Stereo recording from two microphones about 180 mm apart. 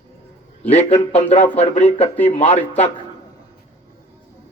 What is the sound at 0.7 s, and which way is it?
A man's voice, 35° left (ahead or behind).